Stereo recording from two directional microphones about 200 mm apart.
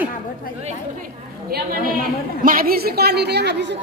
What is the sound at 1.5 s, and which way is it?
A woman's voice, 50° right (ahead or behind).